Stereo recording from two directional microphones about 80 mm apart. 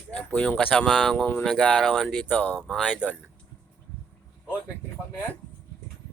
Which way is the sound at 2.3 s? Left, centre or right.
Centre.